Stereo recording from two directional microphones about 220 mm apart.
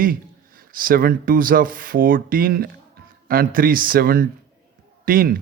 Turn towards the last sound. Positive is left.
turn(degrees=-40)  # may be behind; listen again after turning